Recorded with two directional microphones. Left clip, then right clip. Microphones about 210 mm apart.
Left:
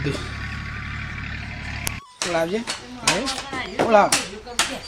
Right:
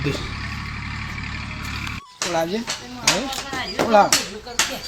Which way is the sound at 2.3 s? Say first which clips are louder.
Even; 15° right (ahead or behind).